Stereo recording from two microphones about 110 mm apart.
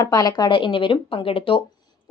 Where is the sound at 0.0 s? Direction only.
35° left (ahead or behind).